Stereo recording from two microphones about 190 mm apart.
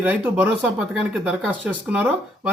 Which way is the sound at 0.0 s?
10° right (ahead or behind).